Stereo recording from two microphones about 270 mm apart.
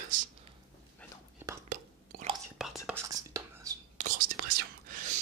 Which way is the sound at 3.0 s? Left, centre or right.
Centre.